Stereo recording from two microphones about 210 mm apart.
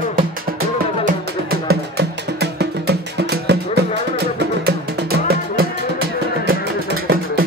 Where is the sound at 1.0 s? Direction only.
50° right (ahead or behind).